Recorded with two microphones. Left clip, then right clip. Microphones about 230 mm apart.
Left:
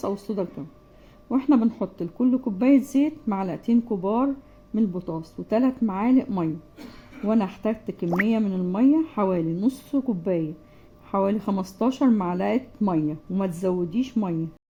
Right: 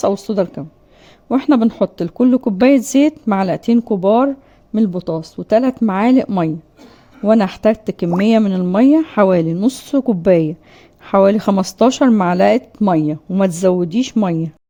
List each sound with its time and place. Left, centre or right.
0.0 s speech: right